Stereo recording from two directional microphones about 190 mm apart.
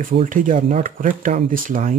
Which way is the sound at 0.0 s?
45° right (ahead or behind).